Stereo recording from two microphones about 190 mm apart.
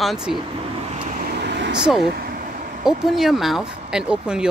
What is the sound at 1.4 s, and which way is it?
Vehicle, 65° right (ahead or behind).